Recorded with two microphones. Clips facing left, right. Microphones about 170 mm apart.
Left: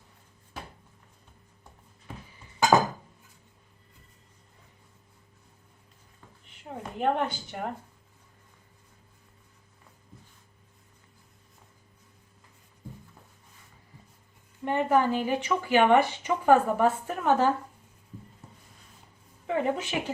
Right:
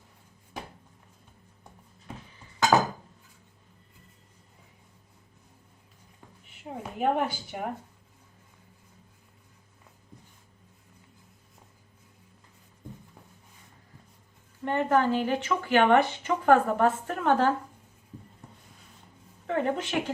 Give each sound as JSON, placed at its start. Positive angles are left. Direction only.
{"t": 6.4, "sound": "speech", "side_deg": -5}
{"t": 14.6, "sound": "speech", "side_deg": 10}
{"t": 19.5, "sound": "speech", "side_deg": 5}